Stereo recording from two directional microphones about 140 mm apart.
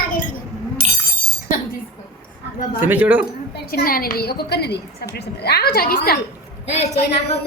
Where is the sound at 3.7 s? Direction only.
90° left.